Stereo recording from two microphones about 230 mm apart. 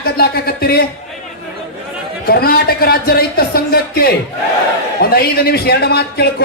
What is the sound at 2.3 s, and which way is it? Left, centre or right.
Speech, left.